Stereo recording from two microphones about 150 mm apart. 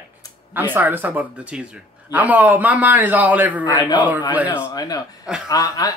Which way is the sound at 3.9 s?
10° right (ahead or behind).